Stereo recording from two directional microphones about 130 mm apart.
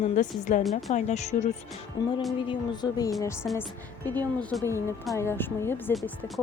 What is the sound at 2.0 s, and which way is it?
Speech, 30° left (ahead or behind).